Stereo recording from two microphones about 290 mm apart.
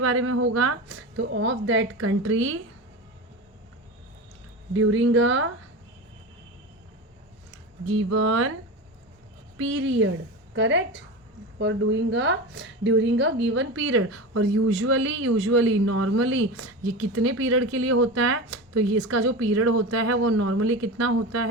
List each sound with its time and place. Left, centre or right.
0.0 s a woman's voice: right
4.7 s a woman's voice: right
7.9 s a woman's voice: right
9.6 s a woman's voice: right